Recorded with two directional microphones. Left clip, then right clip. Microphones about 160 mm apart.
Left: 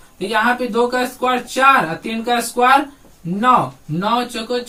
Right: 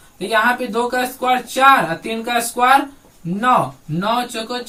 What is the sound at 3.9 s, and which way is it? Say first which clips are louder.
Speech: left 1 dB; 20° left (ahead or behind).